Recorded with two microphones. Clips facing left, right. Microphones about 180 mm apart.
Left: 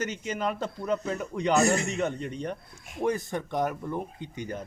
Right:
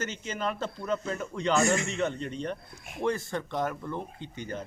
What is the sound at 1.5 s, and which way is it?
Speech, 35° left (ahead or behind).